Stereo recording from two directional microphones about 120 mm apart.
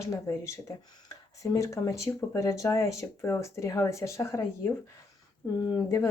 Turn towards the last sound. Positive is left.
turn(degrees=25)  # may be behind; listen again after turning